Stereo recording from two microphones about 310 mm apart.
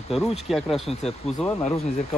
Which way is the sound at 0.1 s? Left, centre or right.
Centre.